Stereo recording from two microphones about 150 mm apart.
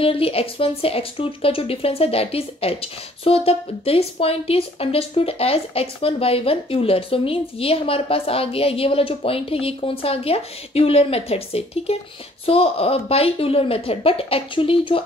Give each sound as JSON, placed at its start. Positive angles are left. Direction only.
{"t": 0.0, "sound": "speech", "side_deg": 40}